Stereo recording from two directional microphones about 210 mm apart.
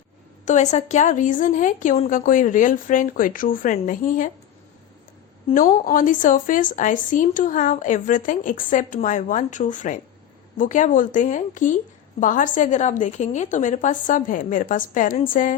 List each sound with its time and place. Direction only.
0.4 s speech: 35° left (ahead or behind)
5.5 s speech: 40° left (ahead or behind)